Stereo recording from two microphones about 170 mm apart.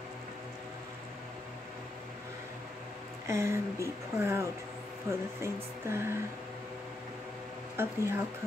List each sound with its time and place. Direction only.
3.3 s speech: 15° right (ahead or behind)
7.7 s speech: 15° right (ahead or behind)